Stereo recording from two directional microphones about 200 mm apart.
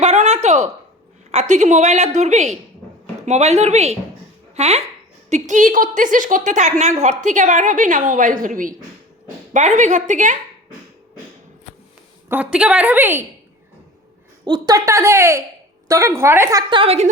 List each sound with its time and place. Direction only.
0.0 s a sound: 35° right (ahead or behind)
1.3 s a woman's voice: 35° right (ahead or behind)
12.3 s a woman's voice: 5° right (ahead or behind)
14.4 s a woman's voice: 20° right (ahead or behind)